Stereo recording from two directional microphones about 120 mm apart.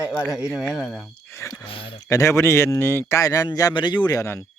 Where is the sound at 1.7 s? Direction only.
50° left (ahead or behind).